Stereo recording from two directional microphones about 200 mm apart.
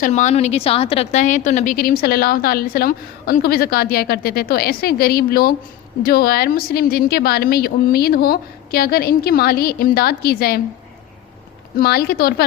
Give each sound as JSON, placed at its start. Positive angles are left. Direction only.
{"t": 0.0, "sound": "a woman's voice", "side_deg": 35}
{"t": 11.8, "sound": "a woman's voice", "side_deg": 50}